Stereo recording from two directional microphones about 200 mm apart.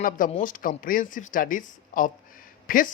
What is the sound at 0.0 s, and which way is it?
Speech, 40° left (ahead or behind).